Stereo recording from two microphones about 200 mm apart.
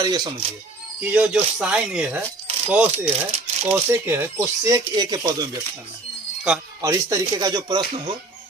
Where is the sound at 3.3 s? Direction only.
35° right (ahead or behind).